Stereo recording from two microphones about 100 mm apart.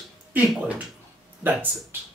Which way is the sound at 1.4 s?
20° right (ahead or behind).